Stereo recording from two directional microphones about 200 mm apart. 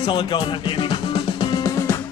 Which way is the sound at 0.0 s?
25° left (ahead or behind).